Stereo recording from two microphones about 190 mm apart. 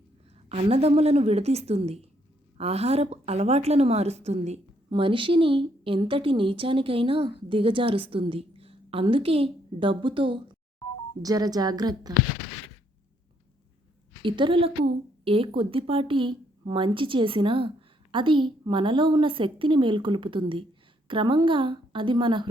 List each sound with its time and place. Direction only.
0.4 s a woman's voice: 35° right (ahead or behind)
14.2 s a woman's voice: 25° right (ahead or behind)